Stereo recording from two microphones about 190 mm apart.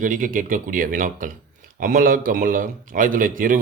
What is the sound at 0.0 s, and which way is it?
Speech, 45° right (ahead or behind).